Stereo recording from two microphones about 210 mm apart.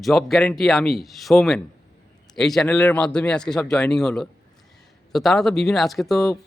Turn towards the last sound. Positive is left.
turn(degrees=0)  # may be behind; listen again after turning